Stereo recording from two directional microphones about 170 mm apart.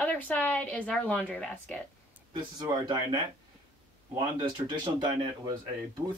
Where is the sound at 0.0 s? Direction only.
10° left (ahead or behind).